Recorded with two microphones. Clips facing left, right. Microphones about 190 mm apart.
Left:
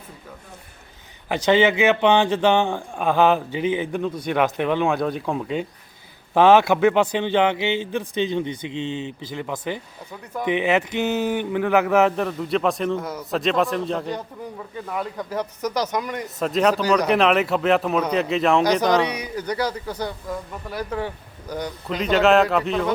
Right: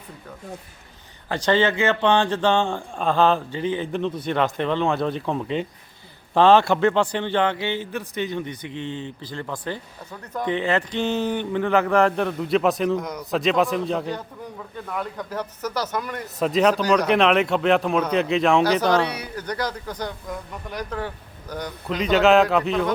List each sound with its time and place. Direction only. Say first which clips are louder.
1.3 s speech: left 3 dB; 15° left (ahead or behind)
11.0 s speech: left 1 dB; 5° left (ahead or behind)
16.2 s speech: right 1 dB; centre (ahead or behind)
18.8 s speech: left 1 dB; 10° left (ahead or behind)
21.8 s speech: even; centre (ahead or behind)